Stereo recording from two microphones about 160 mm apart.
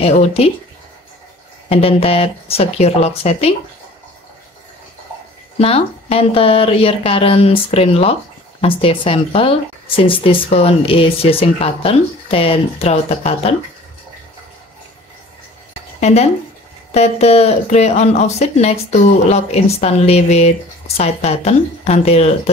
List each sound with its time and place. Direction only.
0.0 s speech: 40° left (ahead or behind)
1.7 s speech: 40° left (ahead or behind)
5.6 s speech: 40° left (ahead or behind)
16.0 s speech: 45° left (ahead or behind)